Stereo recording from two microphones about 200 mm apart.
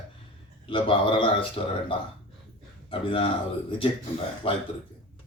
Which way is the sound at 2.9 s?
25° left (ahead or behind).